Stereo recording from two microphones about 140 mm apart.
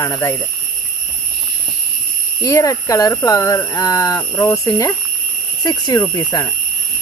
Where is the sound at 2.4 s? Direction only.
25° left (ahead or behind).